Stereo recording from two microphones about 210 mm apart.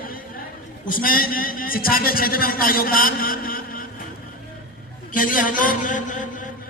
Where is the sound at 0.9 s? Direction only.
40° left (ahead or behind).